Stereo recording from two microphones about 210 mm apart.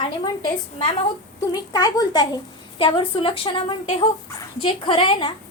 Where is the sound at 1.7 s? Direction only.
20° left (ahead or behind).